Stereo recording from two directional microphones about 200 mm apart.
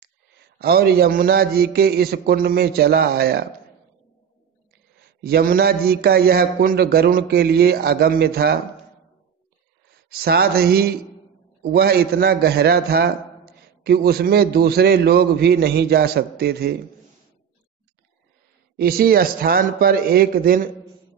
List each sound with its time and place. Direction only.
0.0 s a man's voice: 50° right (ahead or behind)
5.0 s a man's voice: 50° right (ahead or behind)
10.0 s a man's voice: 50° right (ahead or behind)
18.8 s a man's voice: 50° right (ahead or behind)